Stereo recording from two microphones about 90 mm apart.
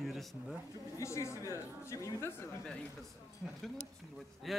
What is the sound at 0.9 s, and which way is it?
A woman's voice, 35° left (ahead or behind).